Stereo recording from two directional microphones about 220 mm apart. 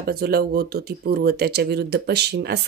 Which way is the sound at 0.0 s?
45° right (ahead or behind).